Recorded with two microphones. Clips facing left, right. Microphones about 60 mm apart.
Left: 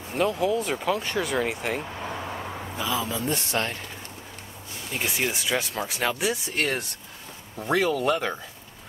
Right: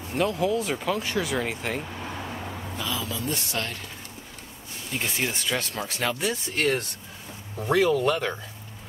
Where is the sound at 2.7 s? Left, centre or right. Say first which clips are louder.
Left 4 dB; centre.